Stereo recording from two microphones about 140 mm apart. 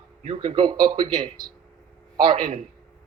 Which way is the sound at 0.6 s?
30° right (ahead or behind).